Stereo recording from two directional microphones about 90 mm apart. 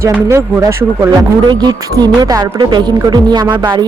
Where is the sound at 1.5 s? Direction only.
50° right (ahead or behind).